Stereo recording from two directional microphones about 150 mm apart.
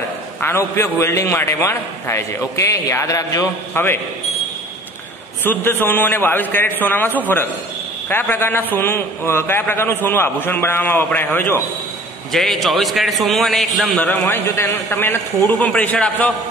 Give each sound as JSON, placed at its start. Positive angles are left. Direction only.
{"t": 0.4, "sound": "a man's voice", "side_deg": 15}
{"t": 5.4, "sound": "a man's voice", "side_deg": 15}
{"t": 12.3, "sound": "a man's voice", "side_deg": 0}